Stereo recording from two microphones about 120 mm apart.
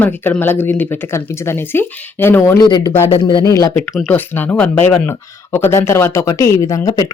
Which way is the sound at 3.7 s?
10° left (ahead or behind).